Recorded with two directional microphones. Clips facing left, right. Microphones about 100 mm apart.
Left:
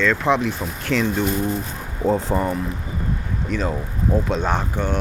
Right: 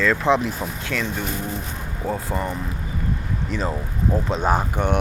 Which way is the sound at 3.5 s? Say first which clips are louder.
Left 3 dB; centre (ahead or behind).